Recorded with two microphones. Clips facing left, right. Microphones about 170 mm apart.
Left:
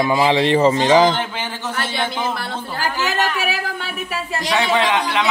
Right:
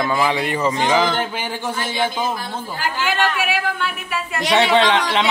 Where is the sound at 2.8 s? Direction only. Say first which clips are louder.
Even; 40° left (ahead or behind).